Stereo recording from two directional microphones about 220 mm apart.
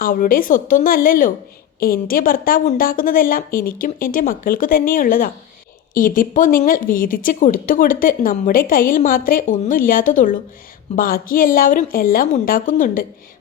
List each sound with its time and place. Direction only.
0.0 s speech: 40° left (ahead or behind)